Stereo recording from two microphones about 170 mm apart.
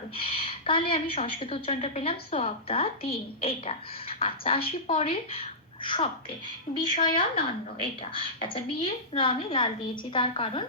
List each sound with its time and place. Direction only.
0.2 s a woman's voice: 35° left (ahead or behind)